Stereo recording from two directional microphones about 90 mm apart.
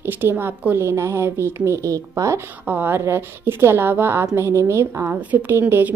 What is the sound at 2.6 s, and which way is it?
A woman's voice, 20° right (ahead or behind).